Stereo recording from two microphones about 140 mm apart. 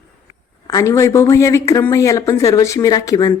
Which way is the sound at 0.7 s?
25° left (ahead or behind).